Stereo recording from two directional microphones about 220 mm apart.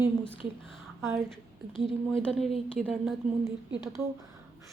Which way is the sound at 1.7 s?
Centre (ahead or behind).